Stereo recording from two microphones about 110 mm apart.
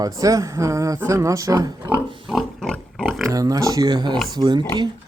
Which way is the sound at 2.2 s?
Centre (ahead or behind).